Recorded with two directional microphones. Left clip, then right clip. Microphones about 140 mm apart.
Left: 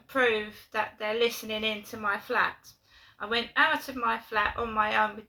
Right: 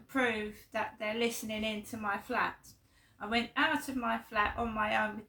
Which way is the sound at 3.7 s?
15° right (ahead or behind).